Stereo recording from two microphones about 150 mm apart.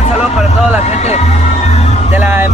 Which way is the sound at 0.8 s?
50° left (ahead or behind).